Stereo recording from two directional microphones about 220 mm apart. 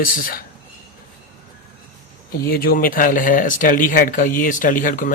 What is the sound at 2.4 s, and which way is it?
Speech, 45° left (ahead or behind).